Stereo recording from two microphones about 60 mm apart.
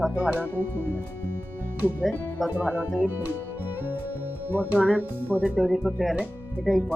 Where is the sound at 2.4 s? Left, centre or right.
Right.